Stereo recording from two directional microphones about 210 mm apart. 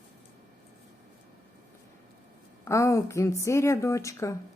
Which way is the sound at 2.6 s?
15° left (ahead or behind).